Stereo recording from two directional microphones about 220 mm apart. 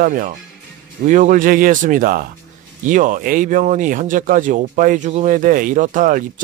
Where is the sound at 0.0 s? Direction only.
35° right (ahead or behind).